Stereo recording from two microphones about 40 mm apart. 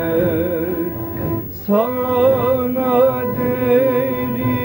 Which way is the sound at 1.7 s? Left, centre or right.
Centre.